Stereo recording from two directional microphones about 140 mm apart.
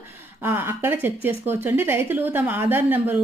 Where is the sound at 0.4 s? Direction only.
15° right (ahead or behind).